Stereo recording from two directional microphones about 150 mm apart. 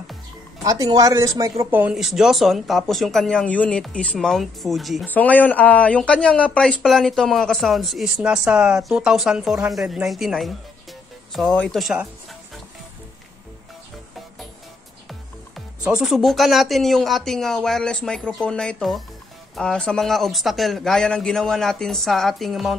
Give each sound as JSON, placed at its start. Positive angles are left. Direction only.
{"t": 0.7, "sound": "speech", "side_deg": -25}
{"t": 1.6, "sound": "speech", "side_deg": -10}
{"t": 5.0, "sound": "speech", "side_deg": 10}
{"t": 15.0, "sound": "speech", "side_deg": 0}